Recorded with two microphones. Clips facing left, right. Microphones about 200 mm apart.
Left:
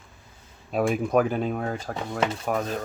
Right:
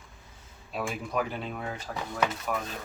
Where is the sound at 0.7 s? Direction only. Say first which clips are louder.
Left 10 dB; 50° left (ahead or behind).